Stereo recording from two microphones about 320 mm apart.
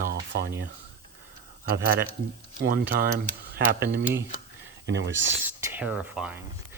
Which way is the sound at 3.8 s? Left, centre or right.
Centre.